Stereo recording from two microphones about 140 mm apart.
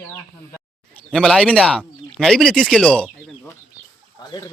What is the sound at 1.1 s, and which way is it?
Speech, 5° left (ahead or behind).